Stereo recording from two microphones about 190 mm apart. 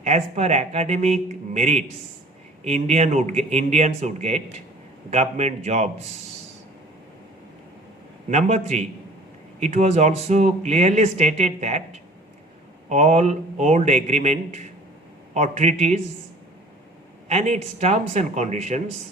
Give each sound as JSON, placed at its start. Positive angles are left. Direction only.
{"t": 0.0, "sound": "speech", "side_deg": -35}
{"t": 8.3, "sound": "speech", "side_deg": -35}
{"t": 17.2, "sound": "speech", "side_deg": -35}